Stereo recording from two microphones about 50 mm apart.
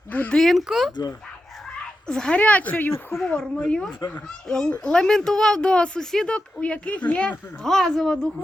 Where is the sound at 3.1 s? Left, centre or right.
Left.